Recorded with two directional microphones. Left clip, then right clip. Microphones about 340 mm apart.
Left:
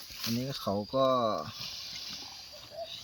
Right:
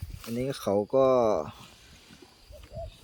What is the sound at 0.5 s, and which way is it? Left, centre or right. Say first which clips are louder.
Speech: right 8 dB; centre.